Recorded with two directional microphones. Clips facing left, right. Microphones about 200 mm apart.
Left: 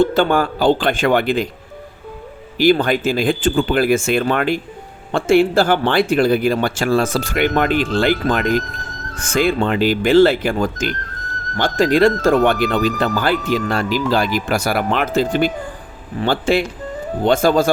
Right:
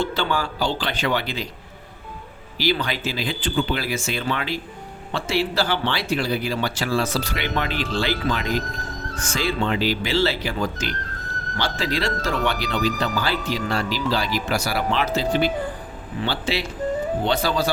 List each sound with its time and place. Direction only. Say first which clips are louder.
0.0 s speech: left 9 dB; 50° left (ahead or behind)
2.6 s speech: left 10 dB; 50° left (ahead or behind)